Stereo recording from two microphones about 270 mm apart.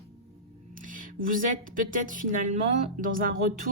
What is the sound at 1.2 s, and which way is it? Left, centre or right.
A woman's voice, right.